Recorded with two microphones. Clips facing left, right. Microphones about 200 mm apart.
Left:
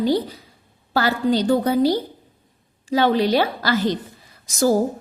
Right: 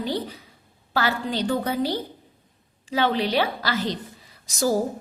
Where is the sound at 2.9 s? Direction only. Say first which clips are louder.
Left 5 dB; 40° left (ahead or behind).